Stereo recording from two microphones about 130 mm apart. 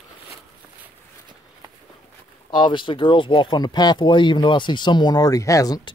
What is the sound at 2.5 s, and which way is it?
Speech, 40° left (ahead or behind).